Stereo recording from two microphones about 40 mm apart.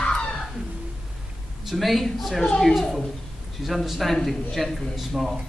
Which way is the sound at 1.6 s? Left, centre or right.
Centre.